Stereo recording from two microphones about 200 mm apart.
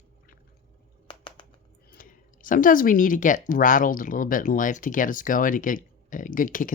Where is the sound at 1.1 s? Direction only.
25° left (ahead or behind).